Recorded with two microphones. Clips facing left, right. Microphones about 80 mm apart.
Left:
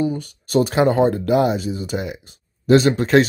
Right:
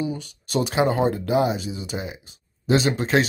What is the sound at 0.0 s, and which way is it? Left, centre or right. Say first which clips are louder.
Speech: left 6 dB; left.